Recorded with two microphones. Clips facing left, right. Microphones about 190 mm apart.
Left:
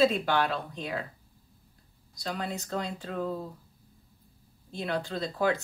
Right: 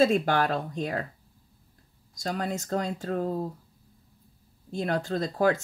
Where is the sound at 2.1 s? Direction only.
45° right (ahead or behind).